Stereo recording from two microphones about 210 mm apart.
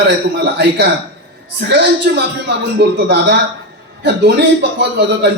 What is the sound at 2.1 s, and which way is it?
A man's voice, 50° right (ahead or behind).